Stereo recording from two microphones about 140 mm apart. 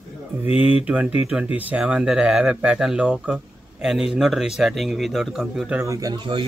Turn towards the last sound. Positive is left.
turn(degrees=-40)  # may be behind; listen again after turning